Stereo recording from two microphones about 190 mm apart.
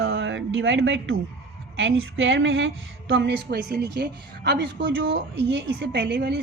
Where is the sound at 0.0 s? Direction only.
85° right.